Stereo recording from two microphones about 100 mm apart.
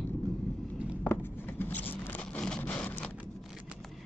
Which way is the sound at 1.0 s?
20° left (ahead or behind).